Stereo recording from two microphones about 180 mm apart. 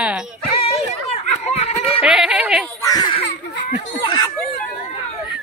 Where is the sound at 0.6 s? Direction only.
35° left (ahead or behind).